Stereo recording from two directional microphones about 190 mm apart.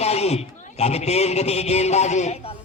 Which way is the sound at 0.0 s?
35° left (ahead or behind).